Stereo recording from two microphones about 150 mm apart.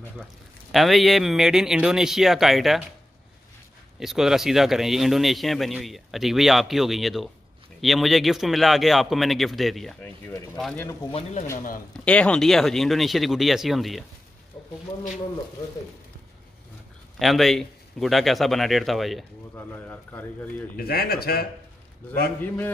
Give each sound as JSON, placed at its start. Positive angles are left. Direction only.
{"t": 0.7, "sound": "speech", "side_deg": 0}
{"t": 4.0, "sound": "speech", "side_deg": 0}
{"t": 10.2, "sound": "a man's voice", "side_deg": 10}
{"t": 11.1, "sound": "speech", "side_deg": 40}
{"t": 11.5, "sound": "a man's voice", "side_deg": 65}
{"t": 11.9, "sound": "speech", "side_deg": 10}
{"t": 17.2, "sound": "speech", "side_deg": 0}
{"t": 19.5, "sound": "a man's voice", "side_deg": 10}
{"t": 20.7, "sound": "speech", "side_deg": 90}